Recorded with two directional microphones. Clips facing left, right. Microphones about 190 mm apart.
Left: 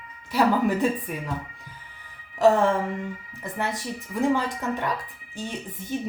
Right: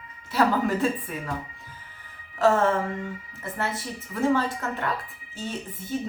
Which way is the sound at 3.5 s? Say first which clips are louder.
Left 1 dB; 15° left (ahead or behind).